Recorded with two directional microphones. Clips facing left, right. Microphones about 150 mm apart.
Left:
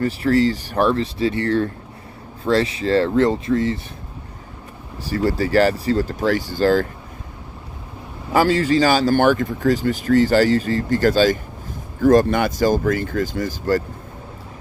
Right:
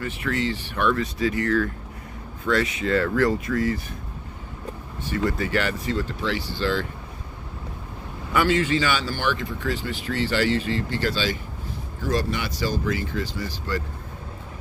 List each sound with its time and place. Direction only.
0.0 s speech: 35° left (ahead or behind)
5.0 s speech: 35° left (ahead or behind)
8.3 s speech: 35° left (ahead or behind)